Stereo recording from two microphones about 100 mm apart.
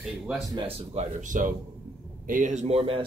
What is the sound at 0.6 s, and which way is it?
Speech, 90° right.